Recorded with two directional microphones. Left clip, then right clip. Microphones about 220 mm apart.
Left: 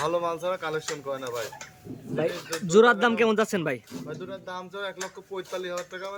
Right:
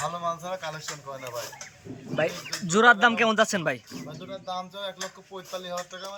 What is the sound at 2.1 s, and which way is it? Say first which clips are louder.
Speech: right 1 dB; centre (ahead or behind).